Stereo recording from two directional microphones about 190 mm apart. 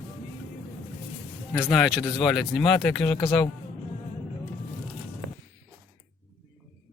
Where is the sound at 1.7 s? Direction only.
5° left (ahead or behind).